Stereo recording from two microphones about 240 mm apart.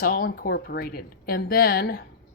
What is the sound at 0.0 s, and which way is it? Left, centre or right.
Speech, left.